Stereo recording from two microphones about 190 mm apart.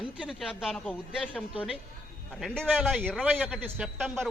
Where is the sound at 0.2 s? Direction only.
Centre (ahead or behind).